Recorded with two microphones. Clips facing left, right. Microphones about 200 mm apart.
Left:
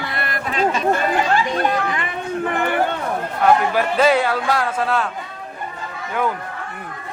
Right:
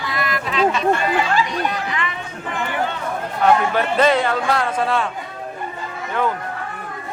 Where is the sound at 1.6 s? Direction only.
50° left (ahead or behind).